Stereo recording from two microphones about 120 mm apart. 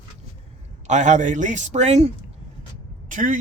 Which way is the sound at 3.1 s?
90° right.